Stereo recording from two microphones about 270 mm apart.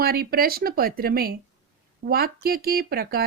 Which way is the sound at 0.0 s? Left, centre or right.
Right.